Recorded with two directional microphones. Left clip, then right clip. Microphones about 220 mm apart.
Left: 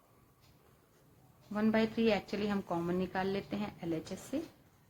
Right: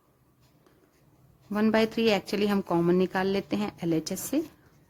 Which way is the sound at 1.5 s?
40° right (ahead or behind).